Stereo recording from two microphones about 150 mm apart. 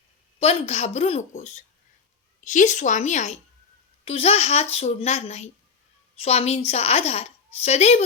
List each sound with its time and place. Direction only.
0.3 s a woman's voice: 45° left (ahead or behind)